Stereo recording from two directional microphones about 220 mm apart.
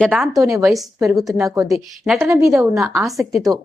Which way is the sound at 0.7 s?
Centre (ahead or behind).